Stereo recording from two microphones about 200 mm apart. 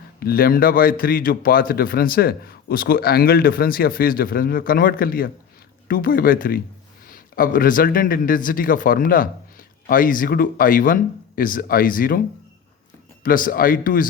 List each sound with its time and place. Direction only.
0.2 s a man's voice: 50° left (ahead or behind)
13.2 s a man's voice: 45° left (ahead or behind)